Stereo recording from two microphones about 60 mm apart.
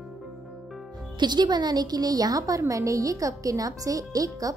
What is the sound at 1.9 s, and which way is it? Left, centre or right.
Speech, right.